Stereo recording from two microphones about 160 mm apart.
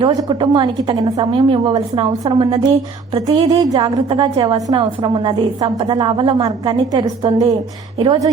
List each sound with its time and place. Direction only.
0.0 s a woman's voice: 25° right (ahead or behind)